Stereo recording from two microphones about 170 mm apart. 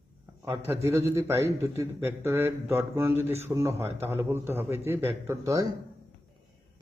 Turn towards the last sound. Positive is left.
turn(degrees=-20)  # may be behind; listen again after turning